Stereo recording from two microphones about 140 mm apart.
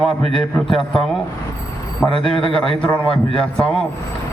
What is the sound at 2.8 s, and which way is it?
Speech, 10° left (ahead or behind).